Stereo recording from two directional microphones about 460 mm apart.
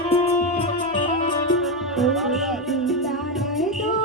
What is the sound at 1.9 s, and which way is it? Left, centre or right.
Music, centre.